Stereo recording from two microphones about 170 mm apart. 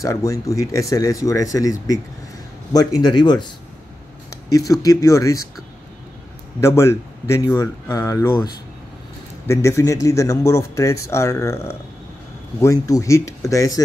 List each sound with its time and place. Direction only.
0.0 s speech: 20° left (ahead or behind)
6.6 s a man's voice: 15° left (ahead or behind)
9.5 s a man's voice: 15° left (ahead or behind)